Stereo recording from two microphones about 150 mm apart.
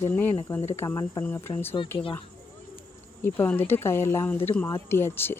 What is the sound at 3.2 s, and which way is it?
Speech, 15° left (ahead or behind).